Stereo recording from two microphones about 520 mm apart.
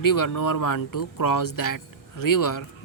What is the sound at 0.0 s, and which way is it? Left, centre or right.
Speech, left.